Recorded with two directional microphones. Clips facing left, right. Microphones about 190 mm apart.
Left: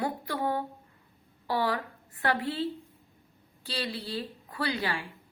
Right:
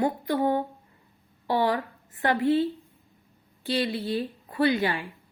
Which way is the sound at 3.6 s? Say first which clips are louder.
Right 8 dB; 20° right (ahead or behind).